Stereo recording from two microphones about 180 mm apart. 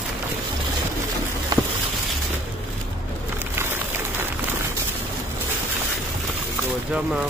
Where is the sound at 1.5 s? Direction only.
20° right (ahead or behind).